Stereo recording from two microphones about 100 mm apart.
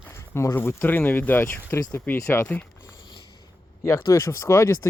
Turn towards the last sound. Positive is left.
turn(degrees=30)  # may be behind; listen again after turning